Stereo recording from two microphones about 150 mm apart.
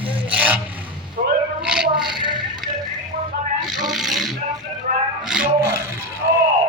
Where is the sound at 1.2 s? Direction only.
75° right (ahead or behind).